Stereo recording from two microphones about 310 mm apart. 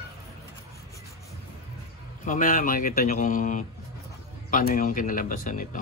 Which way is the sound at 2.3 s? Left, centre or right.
Left.